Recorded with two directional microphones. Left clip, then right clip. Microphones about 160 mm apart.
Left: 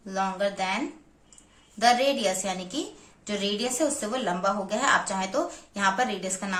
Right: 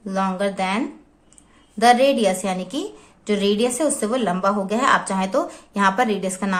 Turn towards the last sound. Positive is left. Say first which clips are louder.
# right 7 dB
turn(degrees=-50)  # may be behind; listen again after turning